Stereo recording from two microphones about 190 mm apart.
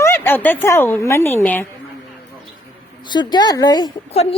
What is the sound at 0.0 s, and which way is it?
A woman's voice, 10° left (ahead or behind).